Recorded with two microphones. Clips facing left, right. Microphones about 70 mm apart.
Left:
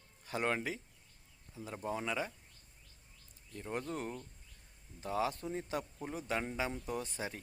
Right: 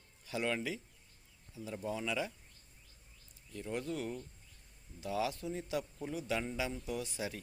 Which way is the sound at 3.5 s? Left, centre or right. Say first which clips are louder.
Right 1 dB; left.